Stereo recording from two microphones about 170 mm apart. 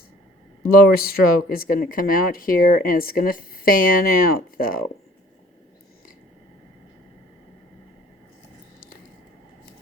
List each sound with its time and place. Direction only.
0.7 s speech: 60° left (ahead or behind)